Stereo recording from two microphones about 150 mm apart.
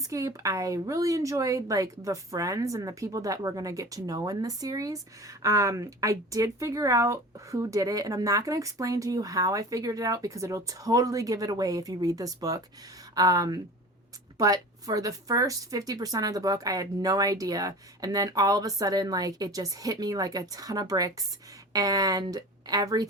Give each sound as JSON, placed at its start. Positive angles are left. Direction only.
{"t": 0.0, "sound": "a woman's voice", "side_deg": -20}